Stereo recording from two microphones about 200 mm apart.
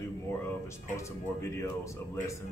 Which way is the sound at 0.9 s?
15° left (ahead or behind).